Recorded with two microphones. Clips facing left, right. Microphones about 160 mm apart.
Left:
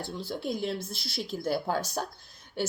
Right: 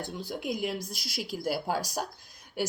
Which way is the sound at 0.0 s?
15° right (ahead or behind).